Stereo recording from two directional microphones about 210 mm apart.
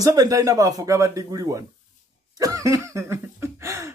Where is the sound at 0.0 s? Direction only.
15° right (ahead or behind).